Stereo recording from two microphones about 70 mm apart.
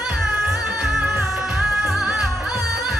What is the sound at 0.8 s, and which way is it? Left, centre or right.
Music, centre.